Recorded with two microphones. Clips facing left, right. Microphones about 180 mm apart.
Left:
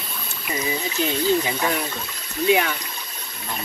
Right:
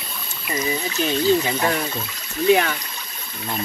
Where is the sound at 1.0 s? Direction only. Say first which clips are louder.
Right 1 dB; 20° left (ahead or behind).